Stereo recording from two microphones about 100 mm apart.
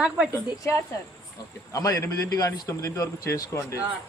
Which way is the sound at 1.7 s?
30° left (ahead or behind).